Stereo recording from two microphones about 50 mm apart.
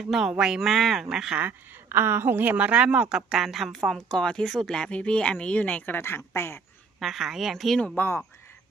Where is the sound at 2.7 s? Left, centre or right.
Right.